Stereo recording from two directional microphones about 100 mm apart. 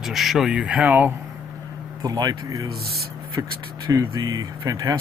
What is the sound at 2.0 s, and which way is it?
Speech, 40° right (ahead or behind).